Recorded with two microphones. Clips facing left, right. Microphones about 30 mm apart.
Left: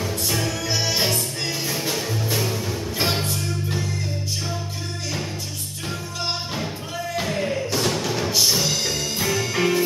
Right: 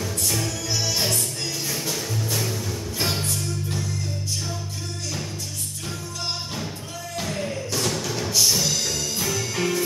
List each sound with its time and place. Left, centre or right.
0.0 s music: centre
7.2 s music: centre